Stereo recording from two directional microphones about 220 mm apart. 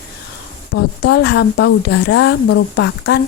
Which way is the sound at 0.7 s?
50° left (ahead or behind).